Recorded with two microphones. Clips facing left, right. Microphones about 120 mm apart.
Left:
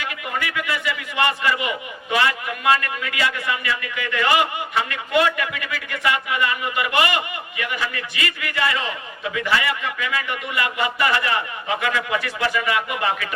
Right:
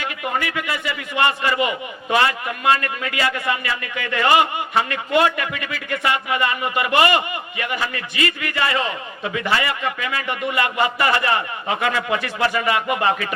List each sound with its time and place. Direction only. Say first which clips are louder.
0.3 s a man's voice: even; 30° right (ahead or behind)